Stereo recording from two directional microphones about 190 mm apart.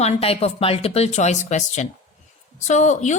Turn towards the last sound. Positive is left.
turn(degrees=40)  # may be behind; listen again after turning